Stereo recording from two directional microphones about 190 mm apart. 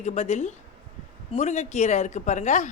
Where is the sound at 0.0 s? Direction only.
35° left (ahead or behind).